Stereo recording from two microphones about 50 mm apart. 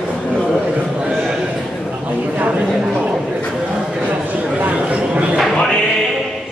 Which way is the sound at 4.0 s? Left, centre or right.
Right.